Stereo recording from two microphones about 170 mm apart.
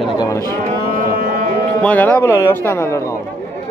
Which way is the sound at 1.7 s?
10° left (ahead or behind).